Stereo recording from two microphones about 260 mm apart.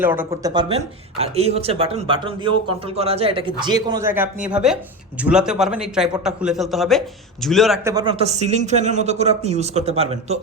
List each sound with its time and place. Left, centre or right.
0.0 s a man's voice: centre
7.9 s a man's voice: centre